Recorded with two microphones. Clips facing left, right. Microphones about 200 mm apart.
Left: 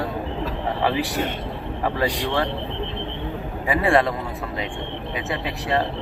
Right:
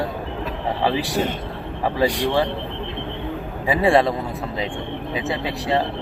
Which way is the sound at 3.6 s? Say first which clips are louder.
Right 2 dB; 30° right (ahead or behind).